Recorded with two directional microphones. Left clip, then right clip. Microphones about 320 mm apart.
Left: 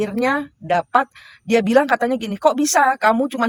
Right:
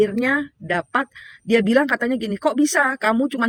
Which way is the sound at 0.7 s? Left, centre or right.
Centre.